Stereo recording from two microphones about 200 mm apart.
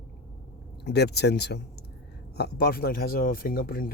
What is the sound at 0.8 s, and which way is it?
Speech, 55° left (ahead or behind).